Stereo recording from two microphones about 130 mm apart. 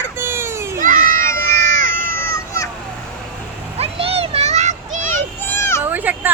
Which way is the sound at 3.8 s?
50° right (ahead or behind).